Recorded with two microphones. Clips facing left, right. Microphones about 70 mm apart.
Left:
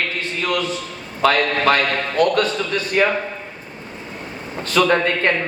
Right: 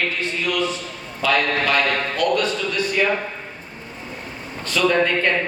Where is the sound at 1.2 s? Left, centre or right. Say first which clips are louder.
Left 3 dB; left.